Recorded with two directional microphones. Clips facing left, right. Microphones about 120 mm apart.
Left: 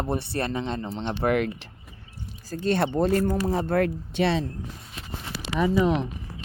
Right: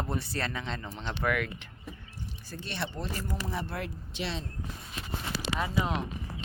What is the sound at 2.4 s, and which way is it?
Speech, 45° left (ahead or behind).